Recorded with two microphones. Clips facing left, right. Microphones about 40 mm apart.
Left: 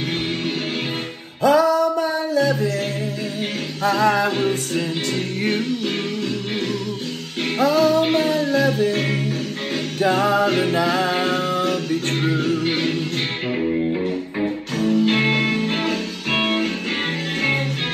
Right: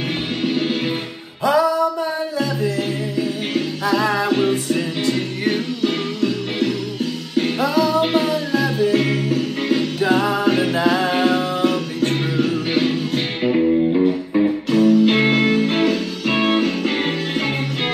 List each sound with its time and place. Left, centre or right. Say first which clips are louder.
1.4 s music: left 1 dB; right
4.0 s music: left 6 dB; right
7.3 s music: right 4 dB; left
7.9 s music: even; right
13.5 s music: right 6 dB; centre
14.7 s music: right 5 dB; right
15.1 s music: right 3 dB; centre
15.8 s music: right 5 dB; left